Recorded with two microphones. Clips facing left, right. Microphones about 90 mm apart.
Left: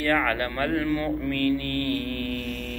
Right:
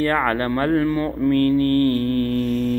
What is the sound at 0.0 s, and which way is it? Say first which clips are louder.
Mantra: right 4 dB; 30° right (ahead or behind).